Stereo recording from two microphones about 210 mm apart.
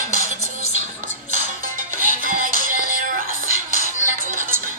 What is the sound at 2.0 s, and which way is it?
Music, 40° right (ahead or behind).